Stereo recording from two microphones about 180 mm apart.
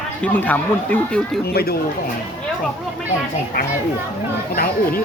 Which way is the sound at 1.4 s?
60° left (ahead or behind).